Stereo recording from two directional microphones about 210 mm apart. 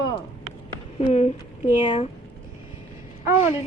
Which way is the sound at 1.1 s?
30° left (ahead or behind).